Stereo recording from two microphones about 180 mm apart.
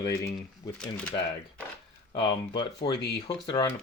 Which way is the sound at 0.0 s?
15° left (ahead or behind).